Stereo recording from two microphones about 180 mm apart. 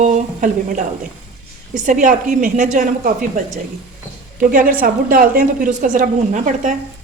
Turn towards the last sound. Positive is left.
turn(degrees=-45)  # may be behind; listen again after turning